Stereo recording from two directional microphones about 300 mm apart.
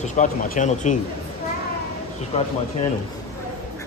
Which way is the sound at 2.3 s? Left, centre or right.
Centre.